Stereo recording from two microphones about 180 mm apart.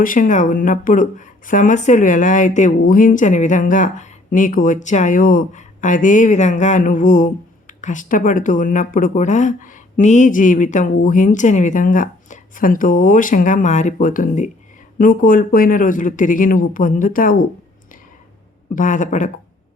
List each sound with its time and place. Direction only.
0.0 s speech: 45° left (ahead or behind)
18.7 s speech: 45° left (ahead or behind)